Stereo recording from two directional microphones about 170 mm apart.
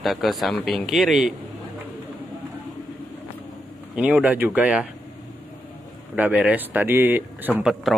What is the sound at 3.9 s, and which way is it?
Speech, 5° right (ahead or behind).